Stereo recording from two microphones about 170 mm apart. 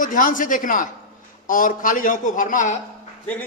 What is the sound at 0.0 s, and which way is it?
A man's voice, 50° left (ahead or behind).